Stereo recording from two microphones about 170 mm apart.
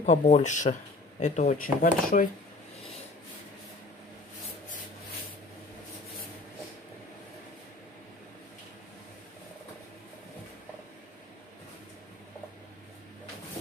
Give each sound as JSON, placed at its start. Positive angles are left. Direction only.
{"t": 0.0, "sound": "speech", "side_deg": 45}